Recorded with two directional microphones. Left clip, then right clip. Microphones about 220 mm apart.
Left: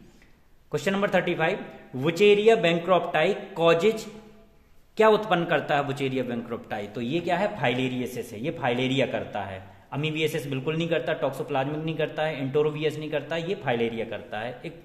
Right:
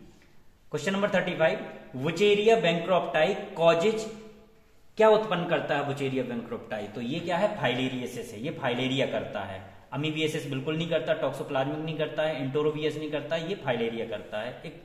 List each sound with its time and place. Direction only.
0.7 s a man's voice: 50° left (ahead or behind)